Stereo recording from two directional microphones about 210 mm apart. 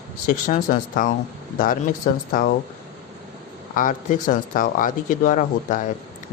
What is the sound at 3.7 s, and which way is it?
Speech, 40° left (ahead or behind).